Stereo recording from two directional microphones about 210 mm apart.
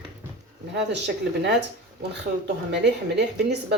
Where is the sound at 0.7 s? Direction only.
55° right (ahead or behind).